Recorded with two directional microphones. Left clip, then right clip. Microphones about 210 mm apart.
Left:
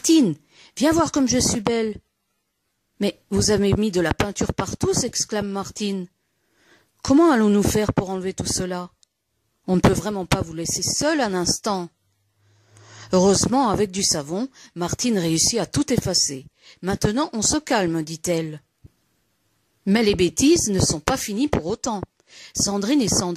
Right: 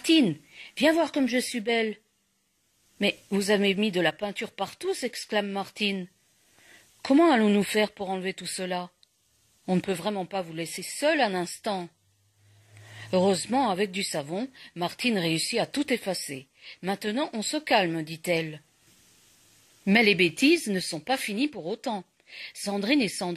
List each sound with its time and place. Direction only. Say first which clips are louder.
0.0 s speech: left 5 dB; 50° left (ahead or behind)
3.0 s speech: left 4 dB; 55° left (ahead or behind)
19.9 s speech: left 2 dB; 50° left (ahead or behind)